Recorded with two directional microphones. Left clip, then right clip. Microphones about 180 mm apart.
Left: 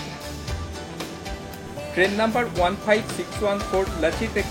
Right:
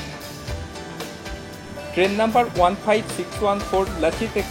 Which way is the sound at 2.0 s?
Centre (ahead or behind).